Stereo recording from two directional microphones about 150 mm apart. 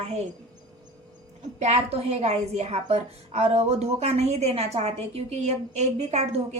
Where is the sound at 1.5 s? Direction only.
50° right (ahead or behind).